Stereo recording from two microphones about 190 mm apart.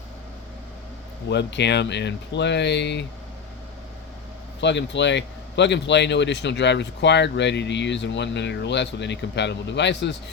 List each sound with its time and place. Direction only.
1.3 s speech: 65° left (ahead or behind)
4.6 s speech: 70° left (ahead or behind)